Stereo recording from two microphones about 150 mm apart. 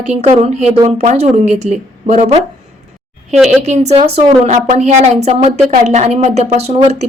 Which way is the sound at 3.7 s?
45° right (ahead or behind).